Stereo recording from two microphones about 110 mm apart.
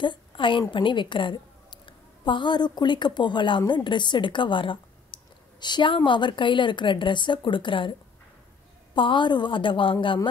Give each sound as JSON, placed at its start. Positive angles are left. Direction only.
{"t": 0.0, "sound": "a woman's voice", "side_deg": 45}
{"t": 8.9, "sound": "a woman's voice", "side_deg": 50}